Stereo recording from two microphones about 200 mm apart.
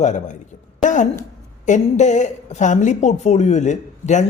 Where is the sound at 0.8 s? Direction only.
40° left (ahead or behind).